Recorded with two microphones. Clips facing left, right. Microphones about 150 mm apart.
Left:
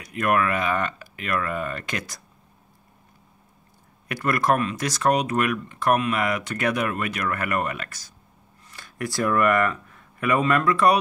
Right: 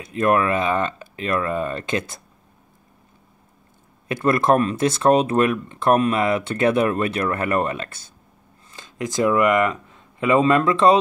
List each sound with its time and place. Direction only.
0.0 s speech: 25° right (ahead or behind)
4.1 s speech: 25° right (ahead or behind)